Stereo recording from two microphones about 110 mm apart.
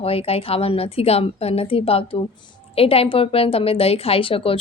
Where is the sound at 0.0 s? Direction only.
60° left (ahead or behind).